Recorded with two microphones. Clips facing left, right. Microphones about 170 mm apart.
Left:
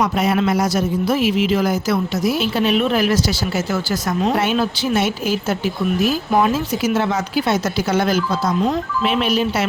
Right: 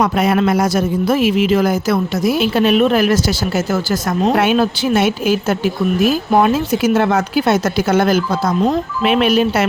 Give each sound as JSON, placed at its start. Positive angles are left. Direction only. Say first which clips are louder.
{"t": 0.0, "sound": "a man's voice", "louder": "right 3 dB", "side_deg": -55}
{"t": 4.4, "sound": "speech", "louder": "right 4 dB", "side_deg": -55}